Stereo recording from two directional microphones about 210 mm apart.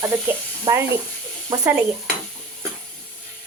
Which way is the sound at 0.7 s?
15° right (ahead or behind).